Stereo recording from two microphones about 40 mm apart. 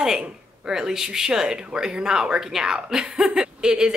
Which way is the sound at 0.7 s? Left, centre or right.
Centre.